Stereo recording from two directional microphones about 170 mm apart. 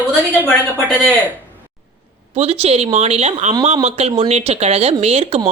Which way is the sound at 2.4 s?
40° right (ahead or behind).